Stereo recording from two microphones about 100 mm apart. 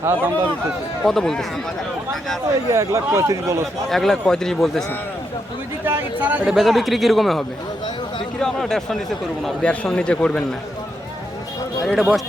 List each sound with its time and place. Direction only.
0.0 s a man's voice: 25° right (ahead or behind)
1.0 s speech: 5° left (ahead or behind)
2.7 s a man's voice: 30° right (ahead or behind)
3.8 s speech: 5° left (ahead or behind)
5.8 s speech: 20° right (ahead or behind)
6.5 s speech: centre (ahead or behind)
11.9 s speech: 5° right (ahead or behind)